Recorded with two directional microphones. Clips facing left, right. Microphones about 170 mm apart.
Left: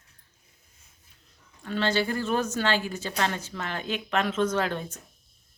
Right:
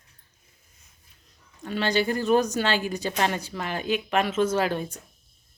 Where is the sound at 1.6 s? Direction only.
15° right (ahead or behind).